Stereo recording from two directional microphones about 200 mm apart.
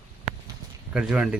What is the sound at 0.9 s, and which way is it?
Speech, 5° right (ahead or behind).